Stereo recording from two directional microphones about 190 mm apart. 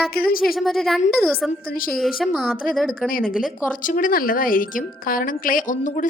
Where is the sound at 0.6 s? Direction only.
Centre (ahead or behind).